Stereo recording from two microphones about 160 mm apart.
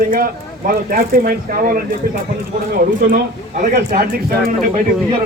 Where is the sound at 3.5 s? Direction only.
70° right (ahead or behind).